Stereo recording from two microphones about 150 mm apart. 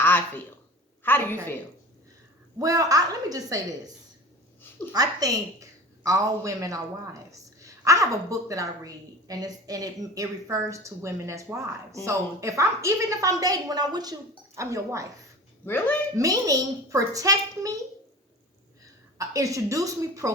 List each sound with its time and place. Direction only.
0.0 s a sound: 15° left (ahead or behind)
1.0 s a woman's voice: 15° left (ahead or behind)
2.6 s a woman's voice: 25° right (ahead or behind)
15.6 s a woman's voice: 15° left (ahead or behind)
16.1 s a woman's voice: 20° right (ahead or behind)
19.2 s a woman's voice: 20° right (ahead or behind)